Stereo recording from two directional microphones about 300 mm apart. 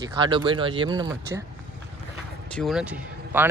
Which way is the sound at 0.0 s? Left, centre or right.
Centre.